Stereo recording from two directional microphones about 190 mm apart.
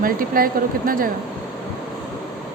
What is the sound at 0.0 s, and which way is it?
Speech, 50° right (ahead or behind).